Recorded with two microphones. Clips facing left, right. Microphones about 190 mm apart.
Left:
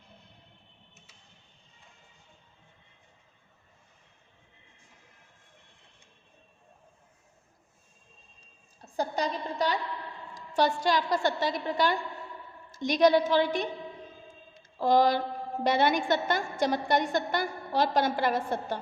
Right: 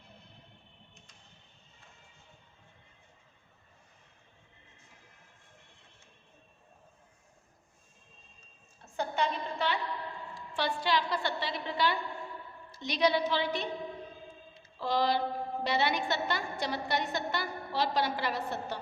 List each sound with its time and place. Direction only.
8.8 s a woman's voice: 35° left (ahead or behind)
14.5 s a sound: 45° left (ahead or behind)
15.6 s a woman's voice: 50° left (ahead or behind)